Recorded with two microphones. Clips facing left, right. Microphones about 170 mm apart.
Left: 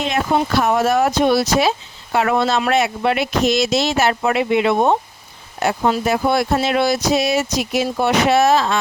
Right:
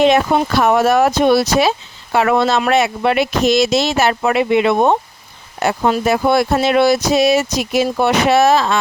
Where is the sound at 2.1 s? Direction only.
90° right.